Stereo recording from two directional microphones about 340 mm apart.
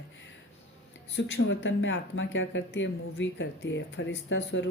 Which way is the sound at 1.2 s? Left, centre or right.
Left.